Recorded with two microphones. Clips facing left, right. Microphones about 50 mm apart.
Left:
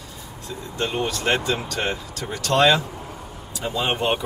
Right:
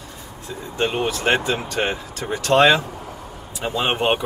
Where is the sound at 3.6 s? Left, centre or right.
Right.